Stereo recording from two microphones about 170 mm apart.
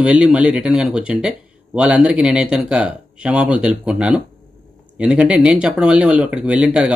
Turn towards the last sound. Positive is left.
turn(degrees=-5)  # may be behind; listen again after turning